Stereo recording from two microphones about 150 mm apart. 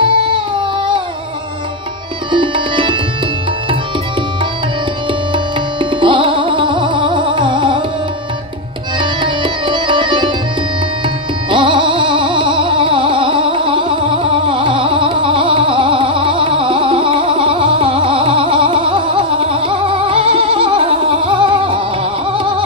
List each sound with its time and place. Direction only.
0.0 s music: 35° right (ahead or behind)
2.3 s music: 35° right (ahead or behind)
5.3 s music: 35° right (ahead or behind)
9.0 s music: 35° right (ahead or behind)
11.5 s music: 35° right (ahead or behind)